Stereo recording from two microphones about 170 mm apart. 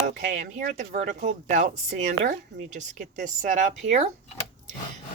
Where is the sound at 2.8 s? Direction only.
50° right (ahead or behind).